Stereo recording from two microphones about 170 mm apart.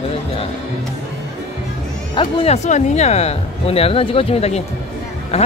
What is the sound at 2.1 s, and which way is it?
Speech, 40° left (ahead or behind).